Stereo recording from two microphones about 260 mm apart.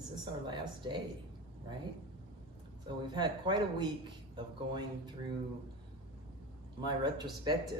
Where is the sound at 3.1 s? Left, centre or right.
Centre.